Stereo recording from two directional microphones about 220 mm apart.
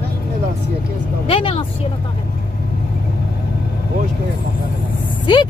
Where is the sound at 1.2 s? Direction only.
25° left (ahead or behind).